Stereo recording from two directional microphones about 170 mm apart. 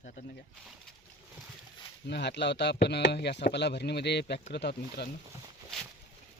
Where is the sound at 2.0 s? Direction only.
85° left.